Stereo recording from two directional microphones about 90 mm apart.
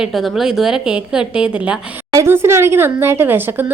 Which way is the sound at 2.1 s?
30° right (ahead or behind).